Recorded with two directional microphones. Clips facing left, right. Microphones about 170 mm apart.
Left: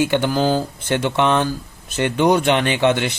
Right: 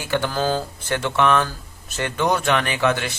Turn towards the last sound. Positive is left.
turn(degrees=20)  # may be behind; listen again after turning